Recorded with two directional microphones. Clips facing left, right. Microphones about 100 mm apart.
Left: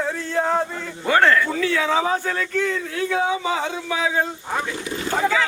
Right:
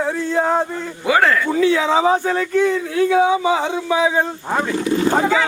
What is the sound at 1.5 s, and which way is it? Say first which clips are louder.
A man's voice: right 5 dB; 20° right (ahead or behind).